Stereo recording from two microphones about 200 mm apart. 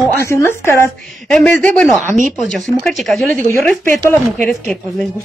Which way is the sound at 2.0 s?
40° right (ahead or behind).